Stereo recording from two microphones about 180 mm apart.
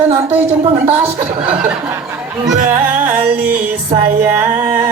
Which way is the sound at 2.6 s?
45° right (ahead or behind).